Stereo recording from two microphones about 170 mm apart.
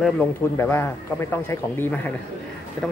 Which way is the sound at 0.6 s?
15° left (ahead or behind).